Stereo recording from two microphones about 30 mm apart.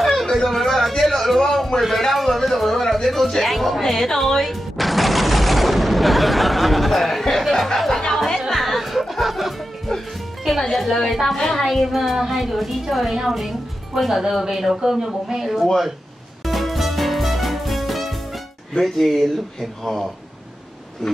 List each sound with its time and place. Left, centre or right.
0.3 s a sound: centre
3.1 s a woman's voice: centre
8.5 s music: centre
10.7 s a woman's voice: centre
15.4 s a woman's voice: centre
16.4 s music: centre
18.7 s a woman's voice: centre